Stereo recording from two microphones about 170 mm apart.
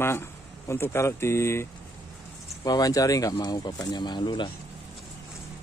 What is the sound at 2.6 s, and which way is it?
Speech, 20° left (ahead or behind).